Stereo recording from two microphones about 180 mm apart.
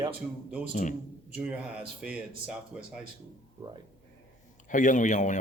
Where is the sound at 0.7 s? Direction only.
45° left (ahead or behind).